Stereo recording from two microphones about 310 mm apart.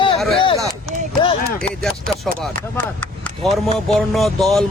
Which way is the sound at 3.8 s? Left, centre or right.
Centre.